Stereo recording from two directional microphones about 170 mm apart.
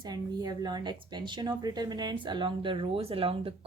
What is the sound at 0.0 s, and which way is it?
Speech, 25° right (ahead or behind).